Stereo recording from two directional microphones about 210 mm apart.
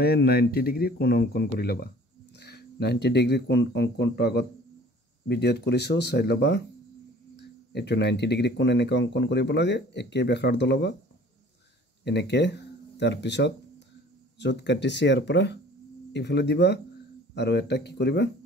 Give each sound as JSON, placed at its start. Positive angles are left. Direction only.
{"t": 0.0, "sound": "speech", "side_deg": 45}
{"t": 12.0, "sound": "speech", "side_deg": 55}